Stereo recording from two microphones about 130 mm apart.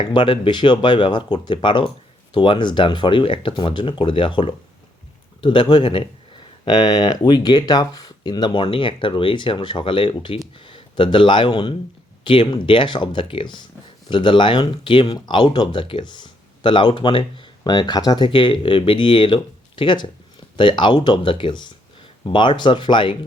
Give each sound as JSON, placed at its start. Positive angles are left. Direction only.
{"t": 0.1, "sound": "speech", "side_deg": 40}